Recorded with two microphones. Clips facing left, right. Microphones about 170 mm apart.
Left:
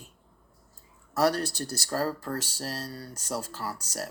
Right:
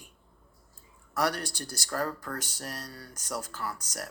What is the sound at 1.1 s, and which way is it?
Speech, 30° left (ahead or behind).